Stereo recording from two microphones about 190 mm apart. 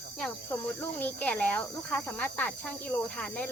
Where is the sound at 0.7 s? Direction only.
10° left (ahead or behind).